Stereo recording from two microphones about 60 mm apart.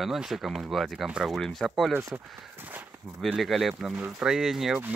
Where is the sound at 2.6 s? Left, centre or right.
Right.